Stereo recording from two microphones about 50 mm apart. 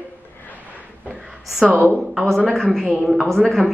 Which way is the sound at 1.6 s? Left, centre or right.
Right.